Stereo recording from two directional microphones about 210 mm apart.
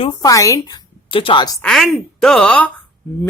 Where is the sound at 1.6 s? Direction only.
Centre (ahead or behind).